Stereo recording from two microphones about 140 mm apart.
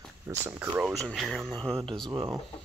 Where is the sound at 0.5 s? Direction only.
15° right (ahead or behind).